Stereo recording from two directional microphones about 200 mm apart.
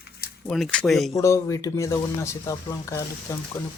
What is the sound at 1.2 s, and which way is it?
Speech, 15° left (ahead or behind).